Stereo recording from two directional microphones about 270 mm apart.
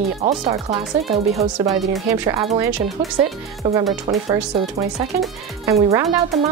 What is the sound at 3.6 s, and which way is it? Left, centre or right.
Speech, centre.